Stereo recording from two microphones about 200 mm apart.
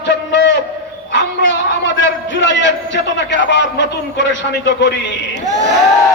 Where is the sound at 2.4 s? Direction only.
65° left (ahead or behind).